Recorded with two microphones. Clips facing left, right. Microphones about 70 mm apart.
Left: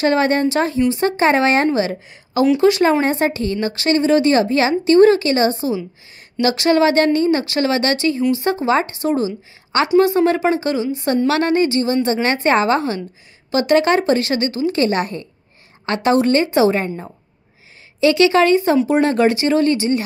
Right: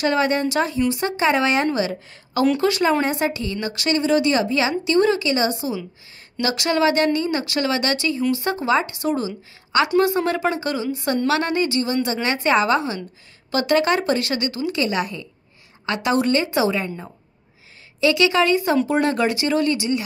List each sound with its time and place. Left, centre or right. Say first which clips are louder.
0.0 s a woman's voice: left 4 dB; left
1.7 s a woman's voice: left 4 dB; left
13.5 s speech: left 4 dB; left
14.8 s a woman's voice: left 4 dB; left
18.0 s a woman's voice: left 4 dB; left